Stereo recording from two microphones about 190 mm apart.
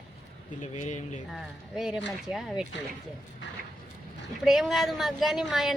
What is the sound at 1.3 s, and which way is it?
Speech, centre (ahead or behind).